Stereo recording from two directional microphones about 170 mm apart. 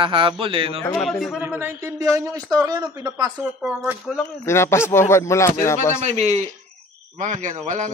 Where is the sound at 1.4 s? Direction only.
10° right (ahead or behind).